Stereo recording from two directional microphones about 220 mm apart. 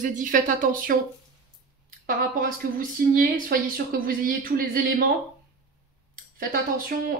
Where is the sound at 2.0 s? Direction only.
40° right (ahead or behind).